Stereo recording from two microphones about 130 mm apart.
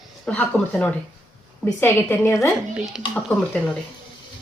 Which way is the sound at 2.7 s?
5° right (ahead or behind).